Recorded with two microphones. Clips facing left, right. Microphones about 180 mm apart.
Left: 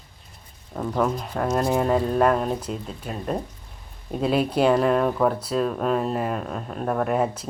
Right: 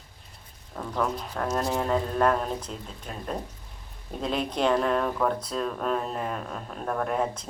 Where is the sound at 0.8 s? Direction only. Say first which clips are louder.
Left 5 dB; 5° left (ahead or behind).